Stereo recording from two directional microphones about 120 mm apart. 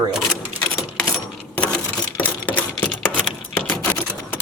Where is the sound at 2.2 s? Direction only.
15° left (ahead or behind).